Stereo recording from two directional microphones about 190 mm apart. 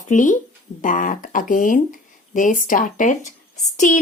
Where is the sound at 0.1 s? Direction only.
40° left (ahead or behind).